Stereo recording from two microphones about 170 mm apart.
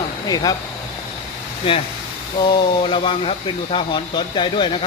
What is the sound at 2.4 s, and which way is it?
Speech, 30° left (ahead or behind).